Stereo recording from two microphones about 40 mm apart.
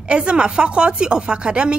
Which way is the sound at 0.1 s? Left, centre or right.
Right.